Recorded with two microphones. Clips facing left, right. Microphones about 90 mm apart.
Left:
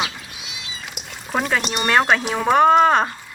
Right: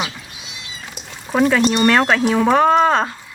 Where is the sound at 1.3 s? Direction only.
5° left (ahead or behind).